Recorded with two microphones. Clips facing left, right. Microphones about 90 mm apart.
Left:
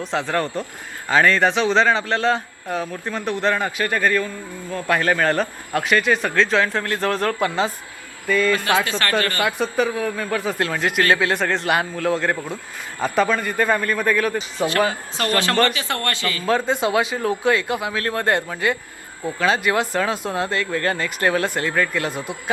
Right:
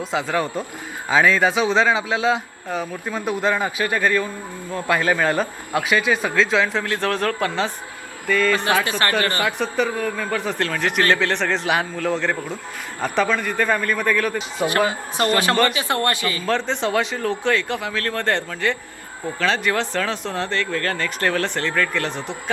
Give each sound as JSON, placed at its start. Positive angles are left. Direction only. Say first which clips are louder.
{"t": 0.1, "sound": "a man's voice", "louder": "even", "side_deg": -5}
{"t": 8.3, "sound": "speech", "louder": "even", "side_deg": 15}
{"t": 8.7, "sound": "speech", "louder": "even", "side_deg": -15}
{"t": 9.4, "sound": "a man's voice", "louder": "left 1 dB", "side_deg": 15}
{"t": 14.6, "sound": "speech", "louder": "even", "side_deg": -20}
{"t": 15.4, "sound": "speech", "louder": "left 3 dB", "side_deg": -15}
{"t": 16.5, "sound": "speech", "louder": "left 3 dB", "side_deg": 10}